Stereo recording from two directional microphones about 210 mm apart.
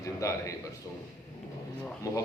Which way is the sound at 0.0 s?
15° left (ahead or behind).